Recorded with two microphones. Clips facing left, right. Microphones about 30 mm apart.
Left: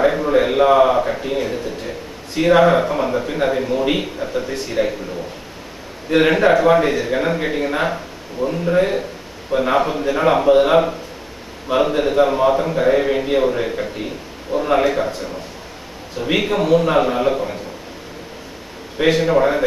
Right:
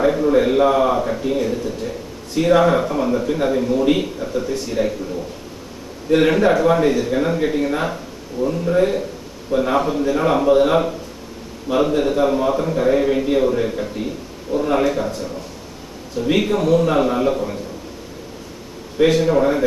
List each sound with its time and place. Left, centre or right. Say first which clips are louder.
0.0 s a man's voice: even; left
6.0 s a man's voice: left 1 dB; centre
18.9 s a man's voice: even; centre